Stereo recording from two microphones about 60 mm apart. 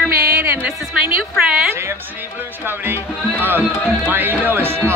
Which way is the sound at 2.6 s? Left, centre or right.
Right.